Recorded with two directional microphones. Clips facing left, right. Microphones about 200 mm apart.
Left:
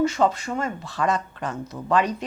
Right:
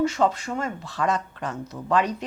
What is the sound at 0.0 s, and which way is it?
Speech, 15° left (ahead or behind).